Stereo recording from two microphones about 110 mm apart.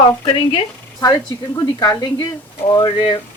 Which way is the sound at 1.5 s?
35° left (ahead or behind).